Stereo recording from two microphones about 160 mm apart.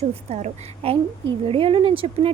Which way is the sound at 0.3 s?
45° right (ahead or behind).